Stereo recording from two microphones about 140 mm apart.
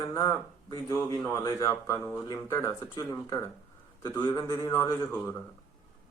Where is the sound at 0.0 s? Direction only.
25° left (ahead or behind).